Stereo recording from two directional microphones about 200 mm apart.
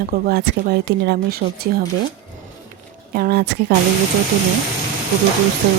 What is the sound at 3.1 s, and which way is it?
Speech, 50° right (ahead or behind).